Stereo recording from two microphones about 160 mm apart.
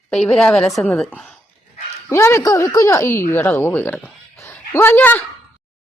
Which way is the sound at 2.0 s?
15° left (ahead or behind).